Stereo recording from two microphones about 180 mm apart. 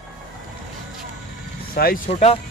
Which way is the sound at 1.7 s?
55° left (ahead or behind).